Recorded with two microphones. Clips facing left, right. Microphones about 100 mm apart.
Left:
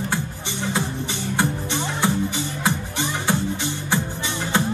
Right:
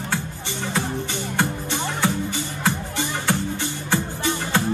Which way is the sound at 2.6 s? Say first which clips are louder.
Right 1 dB; 15° left (ahead or behind).